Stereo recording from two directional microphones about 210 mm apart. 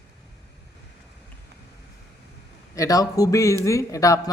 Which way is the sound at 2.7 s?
15° left (ahead or behind).